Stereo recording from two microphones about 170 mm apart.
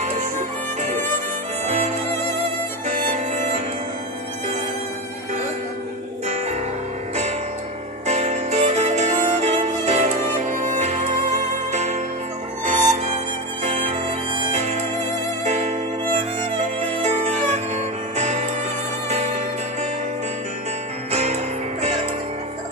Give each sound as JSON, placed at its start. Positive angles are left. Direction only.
{"t": 3.1, "sound": "music", "side_deg": -45}
{"t": 6.2, "sound": "music", "side_deg": -40}
{"t": 8.1, "sound": "music", "side_deg": -40}
{"t": 21.1, "sound": "music", "side_deg": -40}